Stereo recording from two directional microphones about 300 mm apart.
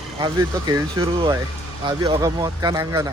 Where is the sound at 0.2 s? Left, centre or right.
Centre.